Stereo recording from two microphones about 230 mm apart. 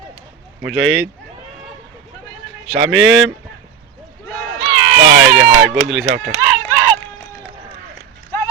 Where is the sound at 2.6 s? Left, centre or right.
Centre.